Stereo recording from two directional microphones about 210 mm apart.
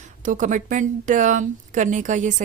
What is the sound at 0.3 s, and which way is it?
Speech, 35° right (ahead or behind).